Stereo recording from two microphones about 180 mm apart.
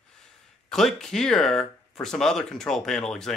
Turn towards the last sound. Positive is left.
turn(degrees=5)  # may be behind; listen again after turning